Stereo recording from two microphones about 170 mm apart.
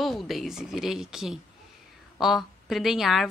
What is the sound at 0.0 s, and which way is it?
Speech, centre (ahead or behind).